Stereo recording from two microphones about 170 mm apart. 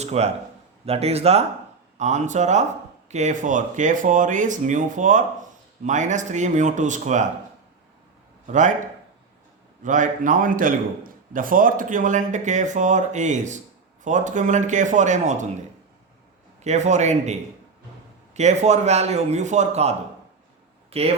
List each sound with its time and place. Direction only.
0.0 s a man's voice: 40° right (ahead or behind)
8.4 s a man's voice: 45° right (ahead or behind)
9.8 s a man's voice: 50° right (ahead or behind)
16.6 s a man's voice: 45° right (ahead or behind)
18.3 s a man's voice: 40° right (ahead or behind)